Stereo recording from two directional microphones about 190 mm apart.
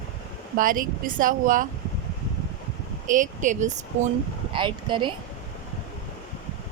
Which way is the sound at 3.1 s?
40° right (ahead or behind).